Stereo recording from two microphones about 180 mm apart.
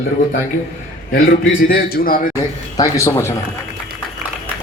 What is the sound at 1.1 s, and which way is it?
A man's voice, 50° left (ahead or behind).